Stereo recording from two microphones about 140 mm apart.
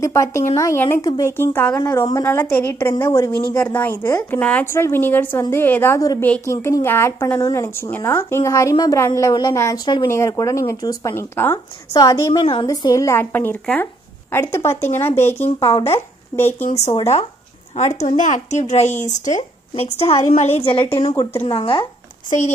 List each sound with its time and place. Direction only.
0.0 s a woman's voice: 20° left (ahead or behind)
1.9 s a woman's voice: 25° left (ahead or behind)
16.6 s a woman's voice: 50° left (ahead or behind)
17.7 s a woman's voice: 60° left (ahead or behind)
20.1 s a woman's voice: 50° left (ahead or behind)
21.1 s speech: 15° left (ahead or behind)
21.5 s speech: 40° left (ahead or behind)